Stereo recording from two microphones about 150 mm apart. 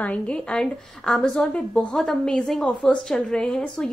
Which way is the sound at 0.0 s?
5° left (ahead or behind).